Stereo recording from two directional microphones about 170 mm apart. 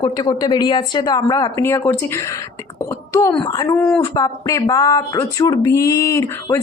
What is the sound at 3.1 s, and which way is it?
A woman's voice, 20° left (ahead or behind).